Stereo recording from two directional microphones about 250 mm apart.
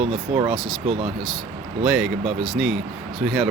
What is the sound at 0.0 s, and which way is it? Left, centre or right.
Speech, right.